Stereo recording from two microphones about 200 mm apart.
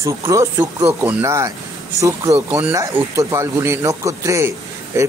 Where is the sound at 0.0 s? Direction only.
15° right (ahead or behind).